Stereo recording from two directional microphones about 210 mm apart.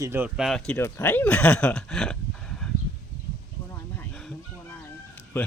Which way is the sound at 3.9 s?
5° left (ahead or behind).